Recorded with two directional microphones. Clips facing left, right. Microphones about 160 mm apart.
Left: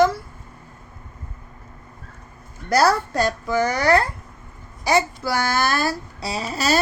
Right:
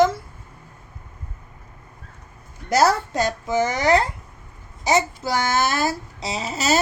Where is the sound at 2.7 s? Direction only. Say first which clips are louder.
Even; 20° right (ahead or behind).